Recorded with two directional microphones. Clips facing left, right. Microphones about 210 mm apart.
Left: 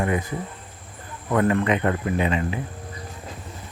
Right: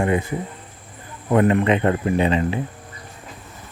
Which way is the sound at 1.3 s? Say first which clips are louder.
Right 4 dB; 20° right (ahead or behind).